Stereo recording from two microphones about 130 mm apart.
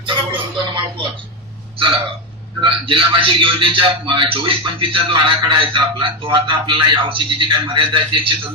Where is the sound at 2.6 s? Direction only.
40° right (ahead or behind).